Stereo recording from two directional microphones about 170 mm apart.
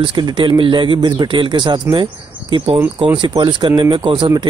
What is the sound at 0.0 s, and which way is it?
A man's voice, 25° right (ahead or behind).